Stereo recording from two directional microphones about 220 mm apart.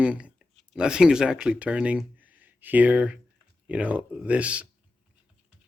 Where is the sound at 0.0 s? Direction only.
5° right (ahead or behind).